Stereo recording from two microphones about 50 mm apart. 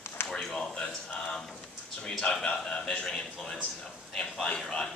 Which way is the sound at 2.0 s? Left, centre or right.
Centre.